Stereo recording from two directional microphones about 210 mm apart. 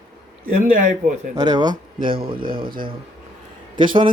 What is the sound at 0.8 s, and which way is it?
Speech, 35° right (ahead or behind).